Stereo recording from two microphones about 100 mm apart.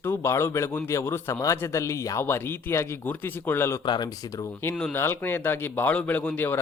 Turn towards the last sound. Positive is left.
turn(degrees=20)  # may be behind; listen again after turning